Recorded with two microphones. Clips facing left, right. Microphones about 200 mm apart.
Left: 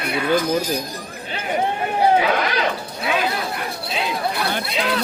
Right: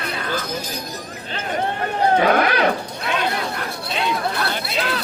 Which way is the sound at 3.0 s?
5° left (ahead or behind).